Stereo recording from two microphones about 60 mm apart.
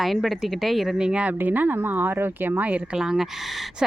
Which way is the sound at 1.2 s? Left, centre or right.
Right.